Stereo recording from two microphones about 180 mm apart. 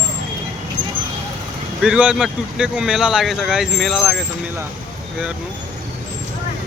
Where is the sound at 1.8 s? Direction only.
5° right (ahead or behind).